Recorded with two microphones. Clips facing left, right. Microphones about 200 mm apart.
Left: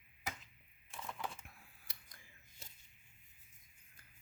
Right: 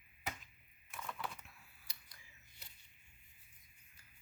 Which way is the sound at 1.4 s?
50° left (ahead or behind).